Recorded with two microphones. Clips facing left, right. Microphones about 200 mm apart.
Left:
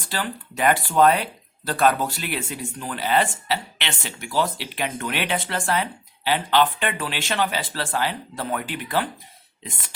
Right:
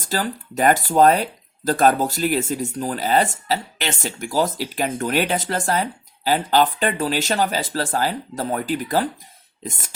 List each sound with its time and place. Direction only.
0.0 s speech: 40° right (ahead or behind)